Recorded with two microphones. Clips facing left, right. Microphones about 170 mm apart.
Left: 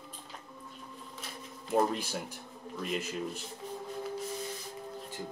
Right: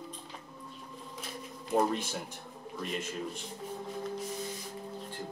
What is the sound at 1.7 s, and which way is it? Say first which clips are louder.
Speech: even; centre (ahead or behind).